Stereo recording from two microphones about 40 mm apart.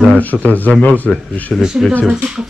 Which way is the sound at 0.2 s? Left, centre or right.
Left.